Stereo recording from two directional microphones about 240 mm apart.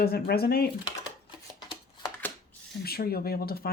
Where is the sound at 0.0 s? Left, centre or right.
Left.